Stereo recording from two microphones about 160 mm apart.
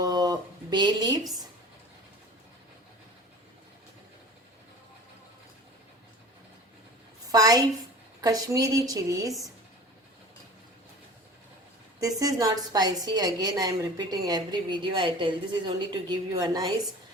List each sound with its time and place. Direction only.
0.0 s a sound: 25° right (ahead or behind)
7.3 s a woman's voice: 25° right (ahead or behind)
12.2 s a woman's voice: 20° right (ahead or behind)